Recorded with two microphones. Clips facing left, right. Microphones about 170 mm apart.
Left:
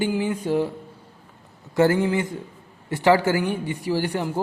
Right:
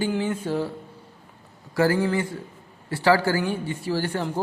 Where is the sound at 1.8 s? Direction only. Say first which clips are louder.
Left 2 dB; 20° left (ahead or behind).